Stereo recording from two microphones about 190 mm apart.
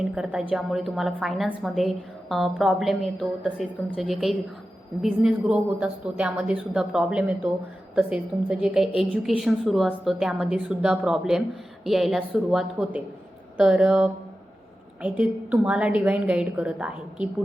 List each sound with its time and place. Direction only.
0.0 s a woman's voice: 5° right (ahead or behind)